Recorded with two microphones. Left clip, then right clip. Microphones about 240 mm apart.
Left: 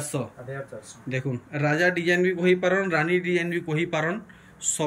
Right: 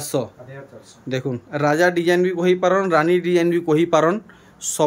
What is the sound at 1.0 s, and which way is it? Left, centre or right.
Speech, centre.